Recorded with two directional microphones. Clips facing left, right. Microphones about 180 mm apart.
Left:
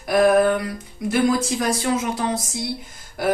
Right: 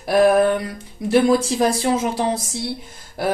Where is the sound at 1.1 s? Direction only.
30° right (ahead or behind).